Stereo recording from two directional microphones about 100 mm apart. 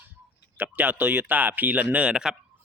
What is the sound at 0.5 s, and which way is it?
Speech, 20° right (ahead or behind).